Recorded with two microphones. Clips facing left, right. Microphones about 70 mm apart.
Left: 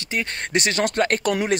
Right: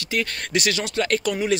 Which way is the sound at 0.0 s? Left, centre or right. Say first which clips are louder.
Right 1 dB; left.